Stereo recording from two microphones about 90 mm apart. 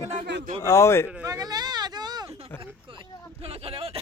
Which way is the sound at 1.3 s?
45° right (ahead or behind).